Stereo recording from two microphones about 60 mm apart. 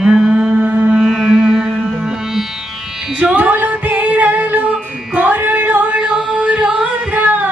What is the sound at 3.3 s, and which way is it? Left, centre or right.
Music, right.